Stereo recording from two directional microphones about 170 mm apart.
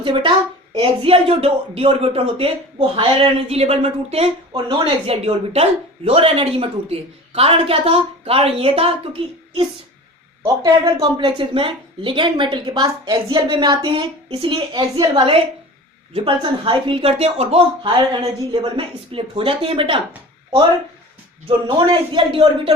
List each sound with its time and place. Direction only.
0.0 s speech: 30° right (ahead or behind)
10.4 s speech: 20° right (ahead or behind)
21.4 s speech: 30° right (ahead or behind)